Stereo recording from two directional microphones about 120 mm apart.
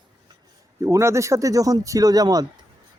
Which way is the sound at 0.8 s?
25° right (ahead or behind).